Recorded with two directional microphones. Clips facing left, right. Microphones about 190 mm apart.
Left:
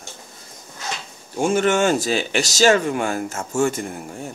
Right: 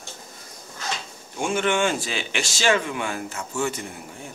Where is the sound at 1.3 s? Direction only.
40° left (ahead or behind).